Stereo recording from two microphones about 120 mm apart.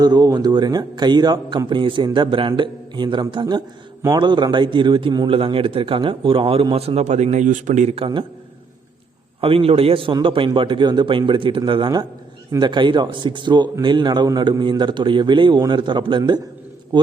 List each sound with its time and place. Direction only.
0.0 s a man's voice: 35° right (ahead or behind); by 7.9 s 85° right
7.9 s a man's voice: 45° right (ahead or behind)
9.4 s a man's voice: 50° right (ahead or behind)